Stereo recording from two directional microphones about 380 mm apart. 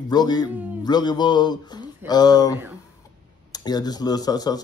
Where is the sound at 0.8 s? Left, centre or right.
Centre.